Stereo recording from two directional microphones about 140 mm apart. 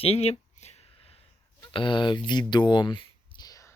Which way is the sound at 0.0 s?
45° left (ahead or behind).